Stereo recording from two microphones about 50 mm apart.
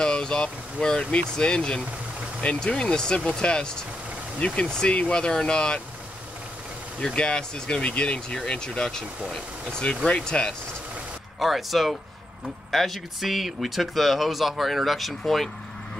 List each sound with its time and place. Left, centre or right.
0.0 s speech: centre
7.2 s speech: centre
10.0 s speech: left
11.3 s speech: centre